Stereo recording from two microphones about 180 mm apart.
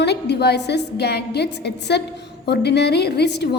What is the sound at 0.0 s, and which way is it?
A woman's voice, 70° left (ahead or behind).